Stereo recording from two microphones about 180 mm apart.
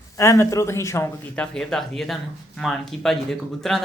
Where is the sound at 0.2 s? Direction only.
15° left (ahead or behind).